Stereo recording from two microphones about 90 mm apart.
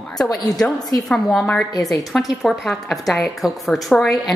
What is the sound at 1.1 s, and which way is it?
A woman's voice, 5° left (ahead or behind).